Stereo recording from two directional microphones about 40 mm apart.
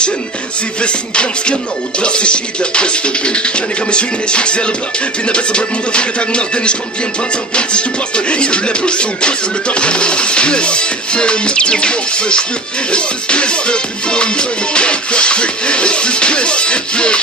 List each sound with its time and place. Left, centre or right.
0.8 s music: left